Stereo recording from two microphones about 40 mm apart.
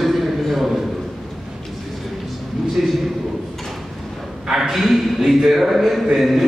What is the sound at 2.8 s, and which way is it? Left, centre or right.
Speech, centre.